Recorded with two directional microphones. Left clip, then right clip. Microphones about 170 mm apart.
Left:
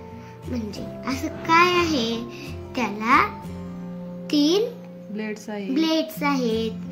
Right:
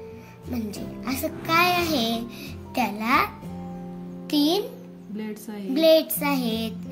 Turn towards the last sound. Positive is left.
turn(degrees=-50)  # may be behind; listen again after turning